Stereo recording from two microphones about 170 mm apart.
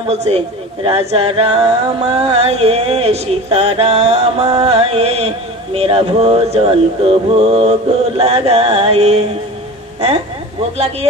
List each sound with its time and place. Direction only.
0.1 s music: 40° right (ahead or behind)
9.9 s a woman's voice: 35° right (ahead or behind)